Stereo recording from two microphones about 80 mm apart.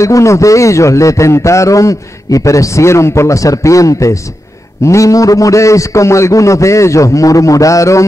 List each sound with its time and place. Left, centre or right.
0.0 s a man's voice: left